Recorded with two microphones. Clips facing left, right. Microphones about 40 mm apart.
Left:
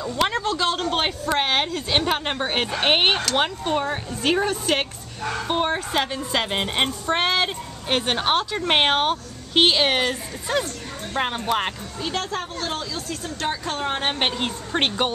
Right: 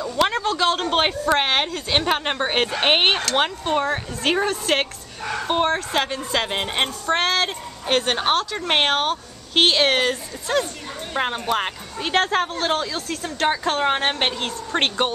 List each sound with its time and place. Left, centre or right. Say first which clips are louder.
0.2 s speech: right 2 dB; centre
0.7 s a woman's voice: right 3 dB; centre
5.7 s a woman's voice: right 2 dB; centre
12.0 s speech: right 7 dB; right
14.1 s a woman's voice: even; centre